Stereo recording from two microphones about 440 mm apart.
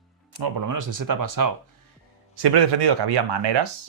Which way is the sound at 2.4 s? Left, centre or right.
Right.